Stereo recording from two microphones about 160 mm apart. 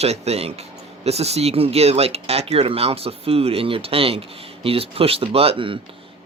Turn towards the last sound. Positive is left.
turn(degrees=-35)  # may be behind; listen again after turning